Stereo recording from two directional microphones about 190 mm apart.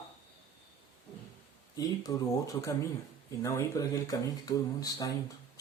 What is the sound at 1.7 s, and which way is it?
Speech, 20° left (ahead or behind).